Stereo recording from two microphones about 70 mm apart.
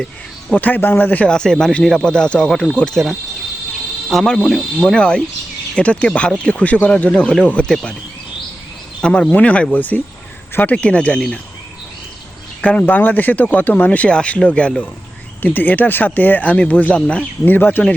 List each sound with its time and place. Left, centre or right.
0.5 s speech: left
1.3 s speech: centre
9.0 s speech: centre; by 10.8 s left
10.8 s speech: centre
12.8 s speech: left
15.4 s speech: left